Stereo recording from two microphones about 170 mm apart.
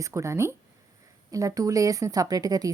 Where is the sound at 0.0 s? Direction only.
20° right (ahead or behind).